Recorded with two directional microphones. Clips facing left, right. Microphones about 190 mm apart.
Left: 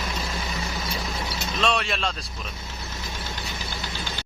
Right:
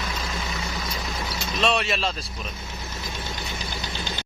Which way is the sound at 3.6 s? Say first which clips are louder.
Right 1 dB; 20° right (ahead or behind).